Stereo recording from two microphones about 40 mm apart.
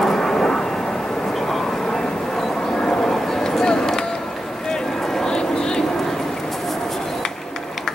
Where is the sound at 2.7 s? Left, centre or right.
Centre.